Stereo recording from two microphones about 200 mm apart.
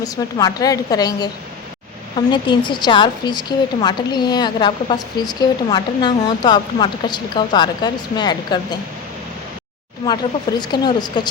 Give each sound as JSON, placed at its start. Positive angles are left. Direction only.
{"t": 0.0, "sound": "a woman's voice", "side_deg": 20}
{"t": 10.6, "sound": "a woman's voice", "side_deg": 20}